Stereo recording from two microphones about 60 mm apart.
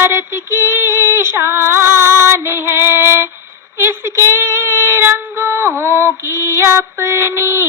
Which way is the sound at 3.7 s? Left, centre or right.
Right.